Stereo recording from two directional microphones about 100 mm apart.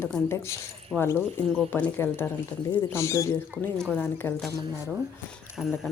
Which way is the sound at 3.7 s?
5° left (ahead or behind).